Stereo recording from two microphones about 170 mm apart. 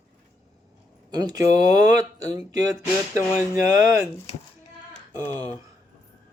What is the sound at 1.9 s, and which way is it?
Speech, 20° right (ahead or behind).